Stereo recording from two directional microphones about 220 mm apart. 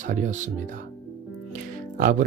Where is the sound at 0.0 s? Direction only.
35° right (ahead or behind).